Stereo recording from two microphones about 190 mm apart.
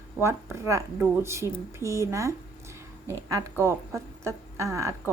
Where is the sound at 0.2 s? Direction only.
15° right (ahead or behind).